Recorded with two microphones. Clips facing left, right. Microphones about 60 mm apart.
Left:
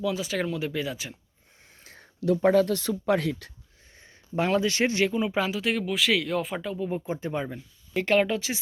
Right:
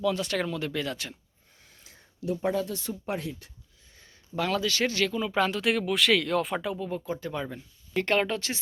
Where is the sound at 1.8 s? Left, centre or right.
Left.